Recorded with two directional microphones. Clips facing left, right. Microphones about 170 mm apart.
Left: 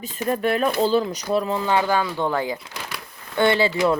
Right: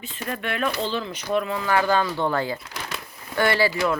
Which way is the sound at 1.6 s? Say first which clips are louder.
Left 1 dB; 20° left (ahead or behind).